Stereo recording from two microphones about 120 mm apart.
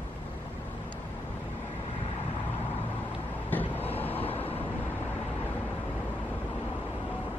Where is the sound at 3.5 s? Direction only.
15° left (ahead or behind).